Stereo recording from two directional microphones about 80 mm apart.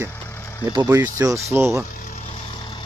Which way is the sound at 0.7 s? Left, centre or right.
Right.